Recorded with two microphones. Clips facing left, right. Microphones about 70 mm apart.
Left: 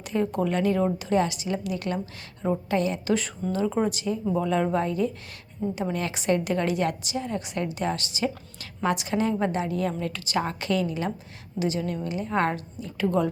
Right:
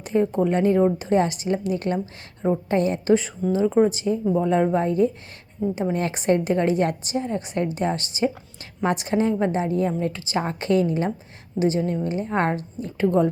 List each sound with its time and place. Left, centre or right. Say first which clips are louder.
0.0 s a woman's voice: right 5 dB; right
3.5 s speech: right 7 dB; centre
3.8 s a woman's voice: right 5 dB; right